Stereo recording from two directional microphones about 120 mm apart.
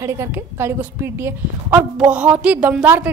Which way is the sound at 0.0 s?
20° right (ahead or behind).